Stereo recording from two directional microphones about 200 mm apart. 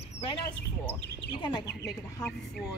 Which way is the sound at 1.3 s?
20° left (ahead or behind).